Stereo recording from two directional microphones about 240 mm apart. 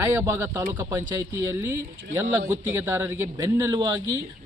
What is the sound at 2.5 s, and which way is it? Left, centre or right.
A man's voice, centre.